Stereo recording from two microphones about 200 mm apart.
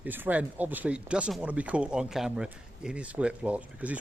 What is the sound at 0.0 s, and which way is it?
Speech, 10° right (ahead or behind).